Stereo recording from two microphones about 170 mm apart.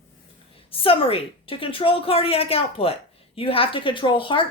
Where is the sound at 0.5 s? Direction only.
30° left (ahead or behind).